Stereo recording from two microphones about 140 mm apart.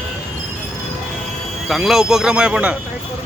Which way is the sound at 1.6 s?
Centre (ahead or behind).